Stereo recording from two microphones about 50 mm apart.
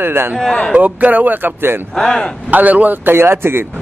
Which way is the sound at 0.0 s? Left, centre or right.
Right.